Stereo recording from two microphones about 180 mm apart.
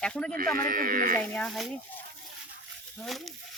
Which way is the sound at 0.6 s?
50° right (ahead or behind).